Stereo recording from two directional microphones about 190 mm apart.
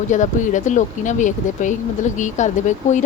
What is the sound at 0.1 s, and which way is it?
Speech, 40° left (ahead or behind).